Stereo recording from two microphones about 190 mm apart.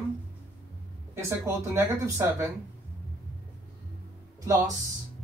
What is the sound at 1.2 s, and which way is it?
Speech, 15° right (ahead or behind).